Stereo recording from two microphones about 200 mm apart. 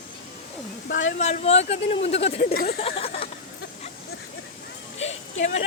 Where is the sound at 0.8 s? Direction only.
70° left (ahead or behind).